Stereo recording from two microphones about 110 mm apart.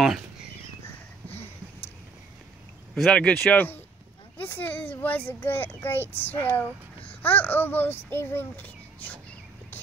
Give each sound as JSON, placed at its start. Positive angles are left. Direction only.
{"t": 2.9, "sound": "a child's voice", "side_deg": 5}